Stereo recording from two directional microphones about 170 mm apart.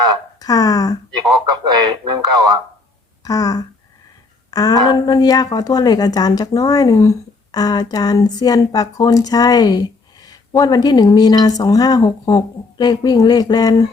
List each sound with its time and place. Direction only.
0.3 s speech: 20° left (ahead or behind)
1.8 s speech: 25° right (ahead or behind)
3.2 s speech: 20° left (ahead or behind)